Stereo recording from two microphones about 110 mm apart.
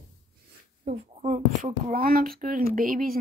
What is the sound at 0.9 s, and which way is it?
Speech, 90° right.